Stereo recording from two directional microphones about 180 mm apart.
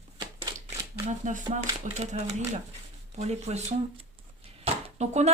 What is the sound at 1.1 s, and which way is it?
Speech, 40° right (ahead or behind).